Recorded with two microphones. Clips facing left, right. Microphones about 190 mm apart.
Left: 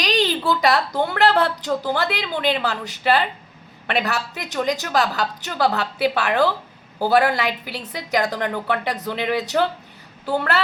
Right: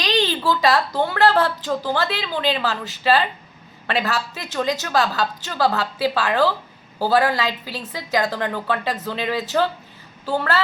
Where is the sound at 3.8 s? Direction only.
20° left (ahead or behind).